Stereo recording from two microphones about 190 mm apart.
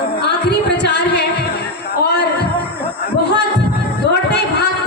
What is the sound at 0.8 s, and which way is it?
Singing, 65° left (ahead or behind).